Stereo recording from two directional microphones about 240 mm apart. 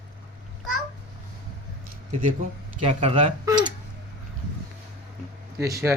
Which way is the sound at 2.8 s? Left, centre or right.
Right.